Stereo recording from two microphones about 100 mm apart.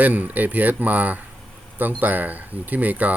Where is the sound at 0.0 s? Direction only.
15° right (ahead or behind).